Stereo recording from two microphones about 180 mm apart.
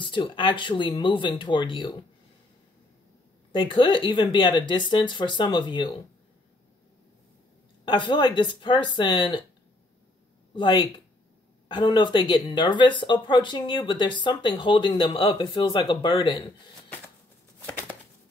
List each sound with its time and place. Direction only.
0.0 s speech: 25° left (ahead or behind)
3.5 s speech: 25° left (ahead or behind)
7.8 s speech: 25° left (ahead or behind)
10.5 s speech: 25° left (ahead or behind)